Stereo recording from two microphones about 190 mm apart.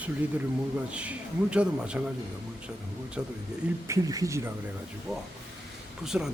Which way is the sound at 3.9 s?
15° right (ahead or behind).